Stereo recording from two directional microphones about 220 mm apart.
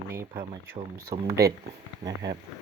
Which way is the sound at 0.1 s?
10° right (ahead or behind).